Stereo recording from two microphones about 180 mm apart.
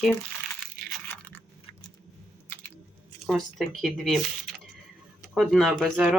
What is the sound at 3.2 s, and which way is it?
Speech, centre (ahead or behind).